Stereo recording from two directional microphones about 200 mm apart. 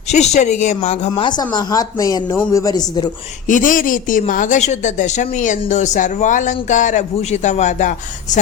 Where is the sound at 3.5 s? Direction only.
40° left (ahead or behind).